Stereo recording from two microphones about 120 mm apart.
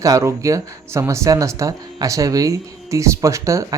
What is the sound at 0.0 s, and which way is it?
Speech, 25° right (ahead or behind).